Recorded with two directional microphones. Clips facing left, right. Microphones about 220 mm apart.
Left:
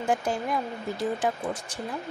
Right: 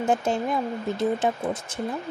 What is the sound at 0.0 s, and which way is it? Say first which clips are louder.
Speech: right 3 dB; 25° right (ahead or behind).